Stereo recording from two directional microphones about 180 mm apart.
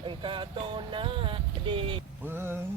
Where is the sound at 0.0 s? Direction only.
30° right (ahead or behind).